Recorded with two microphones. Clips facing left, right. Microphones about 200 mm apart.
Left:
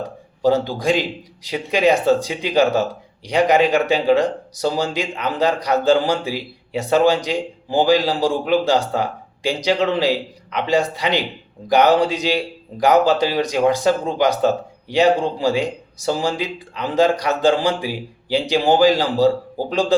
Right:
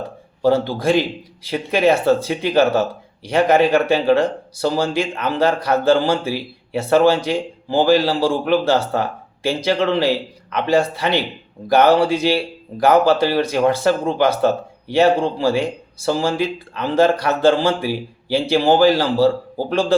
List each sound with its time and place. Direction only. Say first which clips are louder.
0.7 s speech: right 2 dB; 15° left (ahead or behind)